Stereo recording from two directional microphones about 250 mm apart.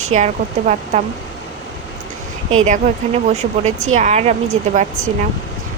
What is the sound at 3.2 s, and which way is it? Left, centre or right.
Speech, right.